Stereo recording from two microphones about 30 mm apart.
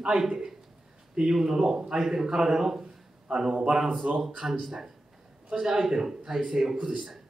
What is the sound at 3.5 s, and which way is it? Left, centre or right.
Speech, right.